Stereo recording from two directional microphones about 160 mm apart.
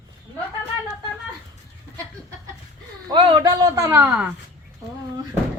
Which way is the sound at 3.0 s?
30° right (ahead or behind).